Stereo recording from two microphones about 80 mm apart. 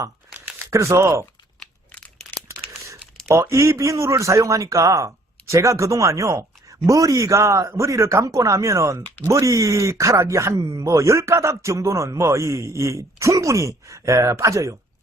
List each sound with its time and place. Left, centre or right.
0.3 s crumpling: right
0.6 s speech: right
2.5 s crumpling: right
3.2 s speech: right